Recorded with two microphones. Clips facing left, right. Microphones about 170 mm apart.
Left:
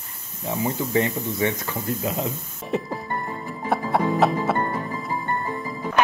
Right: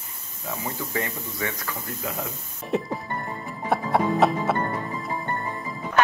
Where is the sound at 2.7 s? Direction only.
Centre (ahead or behind).